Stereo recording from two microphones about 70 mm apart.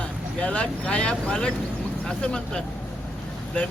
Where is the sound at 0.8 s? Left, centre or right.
Centre.